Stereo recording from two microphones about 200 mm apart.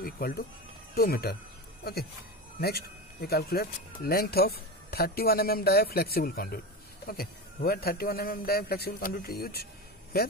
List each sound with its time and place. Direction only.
0.0 s speech: 50° left (ahead or behind)
2.6 s speech: 50° left (ahead or behind)